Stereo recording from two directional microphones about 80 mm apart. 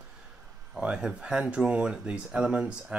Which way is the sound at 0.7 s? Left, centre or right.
Centre.